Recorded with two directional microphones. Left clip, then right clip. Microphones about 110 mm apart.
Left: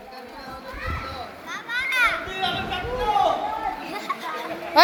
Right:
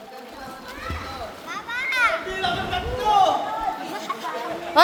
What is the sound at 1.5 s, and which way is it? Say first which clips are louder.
Children playing: left 1 dB; 90° left.